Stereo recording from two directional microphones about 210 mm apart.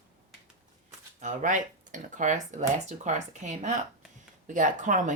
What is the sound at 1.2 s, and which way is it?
Speech, 35° right (ahead or behind).